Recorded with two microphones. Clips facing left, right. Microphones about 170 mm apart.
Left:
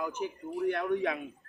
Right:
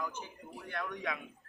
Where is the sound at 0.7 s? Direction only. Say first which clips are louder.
Left 6 dB; 30° left (ahead or behind).